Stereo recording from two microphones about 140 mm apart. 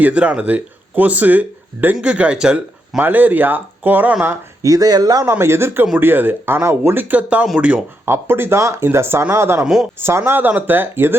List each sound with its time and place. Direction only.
0.0 s speech: 10° right (ahead or behind)
4.6 s speech: 25° right (ahead or behind)